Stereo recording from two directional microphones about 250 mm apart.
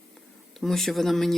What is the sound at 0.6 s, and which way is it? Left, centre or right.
Speech, centre.